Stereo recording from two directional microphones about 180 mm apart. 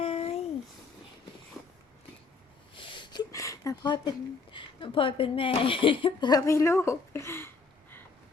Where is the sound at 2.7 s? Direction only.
25° left (ahead or behind).